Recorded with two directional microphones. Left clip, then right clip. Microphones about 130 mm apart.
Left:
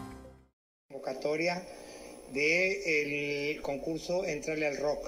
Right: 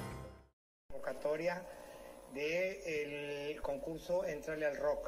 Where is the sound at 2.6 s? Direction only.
30° left (ahead or behind).